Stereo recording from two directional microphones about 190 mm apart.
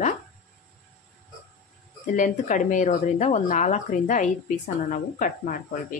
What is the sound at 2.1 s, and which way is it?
A woman's voice, 40° left (ahead or behind).